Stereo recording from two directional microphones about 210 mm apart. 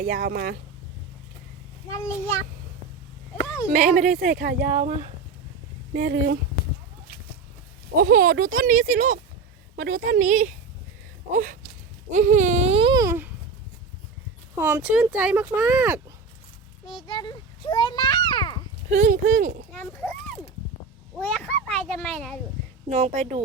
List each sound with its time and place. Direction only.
0.0 s speech: 40° right (ahead or behind)
3.7 s a woman's voice: 40° right (ahead or behind)
5.9 s speech: 50° right (ahead or behind)
7.9 s a woman's voice: 40° right (ahead or behind)
12.1 s baby cry: 35° right (ahead or behind); by 13.3 s 10° right (ahead or behind)
14.5 s speech: 10° right (ahead or behind)
17.1 s children playing: 20° left (ahead or behind)
18.9 s a woman's voice: 35° right (ahead or behind)
19.7 s children playing: 5° left (ahead or behind)
21.2 s a child's voice: 5° left (ahead or behind)
22.9 s a woman's voice: 30° right (ahead or behind)